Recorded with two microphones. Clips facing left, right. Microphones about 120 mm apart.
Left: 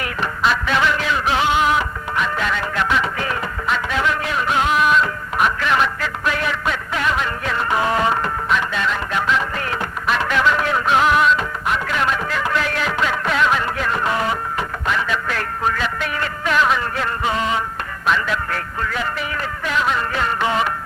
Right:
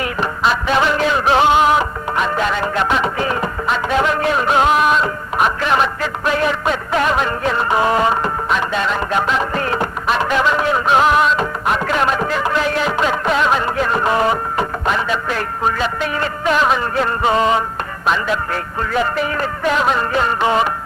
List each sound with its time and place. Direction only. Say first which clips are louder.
0.0 s music: right 3 dB; 25° right (ahead or behind); by 17.6 s 40° right (ahead or behind)
18.0 s music: right 2 dB; 25° right (ahead or behind)